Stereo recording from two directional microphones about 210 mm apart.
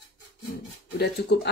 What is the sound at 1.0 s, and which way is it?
Speech, 50° left (ahead or behind).